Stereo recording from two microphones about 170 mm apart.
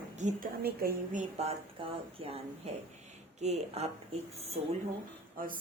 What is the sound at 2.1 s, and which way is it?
Speech, 35° right (ahead or behind).